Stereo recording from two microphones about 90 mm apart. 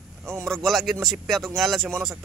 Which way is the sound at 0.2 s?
30° right (ahead or behind).